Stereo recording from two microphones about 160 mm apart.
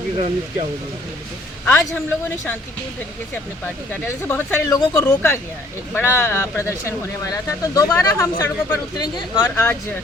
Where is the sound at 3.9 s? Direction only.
15° left (ahead or behind).